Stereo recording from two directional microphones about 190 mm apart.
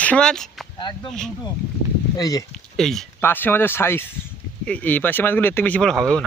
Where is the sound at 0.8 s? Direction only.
25° left (ahead or behind).